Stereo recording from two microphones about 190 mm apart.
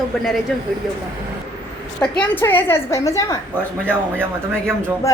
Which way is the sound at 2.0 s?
5° left (ahead or behind).